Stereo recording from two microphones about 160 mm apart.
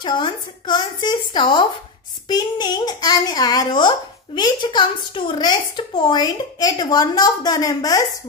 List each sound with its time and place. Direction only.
0.0 s a woman's voice: 30° left (ahead or behind)